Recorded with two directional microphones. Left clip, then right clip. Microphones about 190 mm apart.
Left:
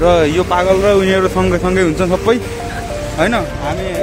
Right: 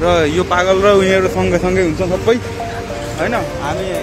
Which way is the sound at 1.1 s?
15° left (ahead or behind).